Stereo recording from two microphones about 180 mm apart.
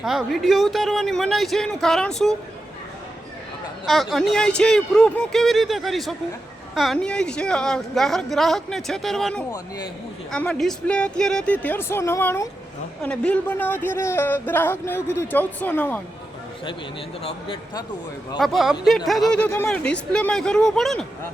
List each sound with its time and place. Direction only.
0.0 s speech: centre (ahead or behind)
3.8 s speech: centre (ahead or behind)
9.5 s a man's voice: 20° left (ahead or behind)
10.3 s a man's voice: 5° left (ahead or behind)
17.2 s a man's voice: 30° left (ahead or behind)
18.3 s speech: centre (ahead or behind)